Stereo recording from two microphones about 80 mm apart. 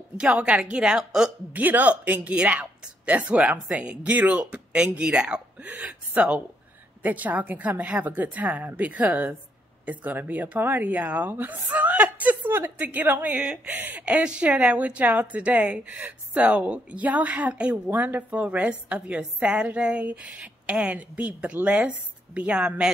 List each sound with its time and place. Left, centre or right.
0.2 s speech: centre
1.5 s speech: right